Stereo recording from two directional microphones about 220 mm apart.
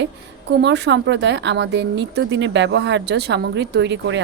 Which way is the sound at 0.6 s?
50° right (ahead or behind).